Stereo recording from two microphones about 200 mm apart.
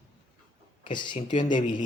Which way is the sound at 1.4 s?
25° left (ahead or behind).